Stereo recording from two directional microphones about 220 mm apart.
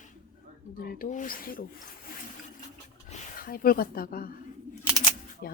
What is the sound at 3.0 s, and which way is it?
Speech, 40° left (ahead or behind).